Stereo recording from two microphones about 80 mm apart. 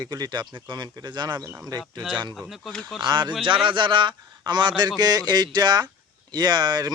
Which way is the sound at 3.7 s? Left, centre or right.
Right.